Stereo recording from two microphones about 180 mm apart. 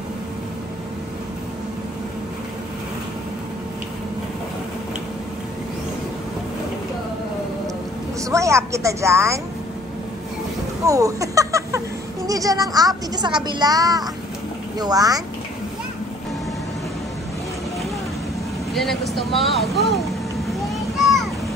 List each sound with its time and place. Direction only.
8.3 s a woman's voice: 15° right (ahead or behind)
10.9 s speech: 20° right (ahead or behind)
18.7 s speech: centre (ahead or behind)
21.0 s a sound: centre (ahead or behind)